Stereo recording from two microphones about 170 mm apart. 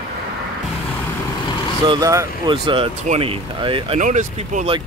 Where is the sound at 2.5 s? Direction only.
30° right (ahead or behind).